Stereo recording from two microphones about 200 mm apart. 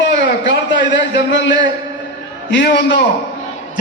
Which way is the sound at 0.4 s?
65° left (ahead or behind).